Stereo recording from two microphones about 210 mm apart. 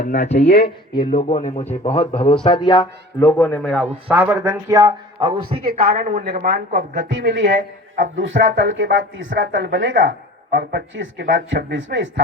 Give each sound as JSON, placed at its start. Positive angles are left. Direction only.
{"t": 0.0, "sound": "speech", "side_deg": 35}
{"t": 0.4, "sound": "speech", "side_deg": 45}
{"t": 1.1, "sound": "a man's voice", "side_deg": 35}
{"t": 2.6, "sound": "speech", "side_deg": 15}
{"t": 4.1, "sound": "speech", "side_deg": -10}
{"t": 5.7, "sound": "a woman's voice", "side_deg": -30}
{"t": 7.0, "sound": "speech", "side_deg": -60}